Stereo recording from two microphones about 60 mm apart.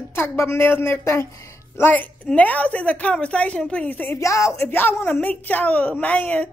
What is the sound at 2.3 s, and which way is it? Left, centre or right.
A woman's voice, left.